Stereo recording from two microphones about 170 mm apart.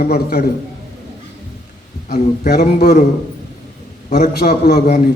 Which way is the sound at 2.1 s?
65° left (ahead or behind).